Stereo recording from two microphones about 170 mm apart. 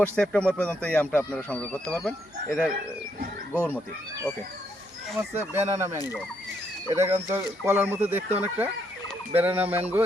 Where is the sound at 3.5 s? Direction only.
10° left (ahead or behind).